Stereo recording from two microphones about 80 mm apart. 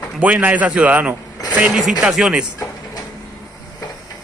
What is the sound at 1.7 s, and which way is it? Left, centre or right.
Speech, centre.